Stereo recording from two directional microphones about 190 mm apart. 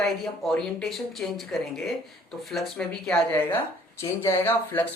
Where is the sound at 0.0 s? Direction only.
Centre (ahead or behind).